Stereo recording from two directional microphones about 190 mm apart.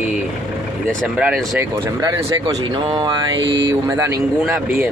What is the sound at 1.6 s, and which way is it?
Speech, 15° right (ahead or behind).